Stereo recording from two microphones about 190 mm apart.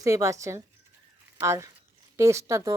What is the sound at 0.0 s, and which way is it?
Speech, 15° right (ahead or behind).